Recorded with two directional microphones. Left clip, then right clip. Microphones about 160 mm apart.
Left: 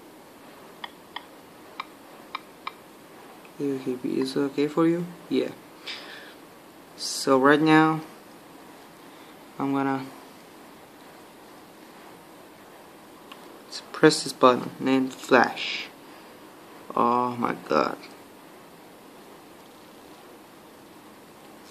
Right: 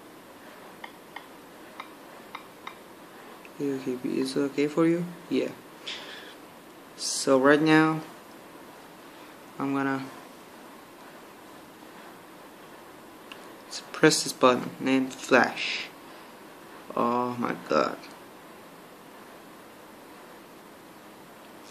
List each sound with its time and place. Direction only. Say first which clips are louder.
3.6 s speech: left 2 dB; 15° left (ahead or behind)
9.6 s speech: left 2 dB; 15° left (ahead or behind)
13.7 s speech: left 2 dB; 10° left (ahead or behind)
16.9 s speech: left 4 dB; 20° left (ahead or behind)